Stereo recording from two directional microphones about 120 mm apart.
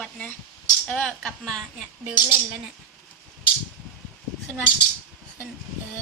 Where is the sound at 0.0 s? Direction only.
10° left (ahead or behind).